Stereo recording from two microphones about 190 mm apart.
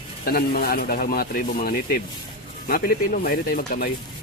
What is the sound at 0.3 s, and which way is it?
Speech, 55° left (ahead or behind).